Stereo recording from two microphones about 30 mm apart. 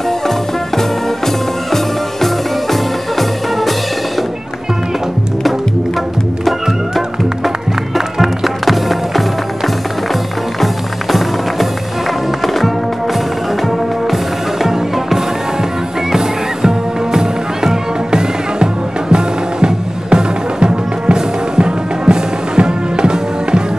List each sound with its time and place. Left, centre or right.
0.7 s music: centre
8.2 s music: centre
10.6 s music: centre
13.7 s music: centre
16.6 s music: right